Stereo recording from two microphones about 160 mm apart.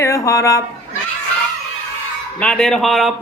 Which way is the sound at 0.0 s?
20° left (ahead or behind).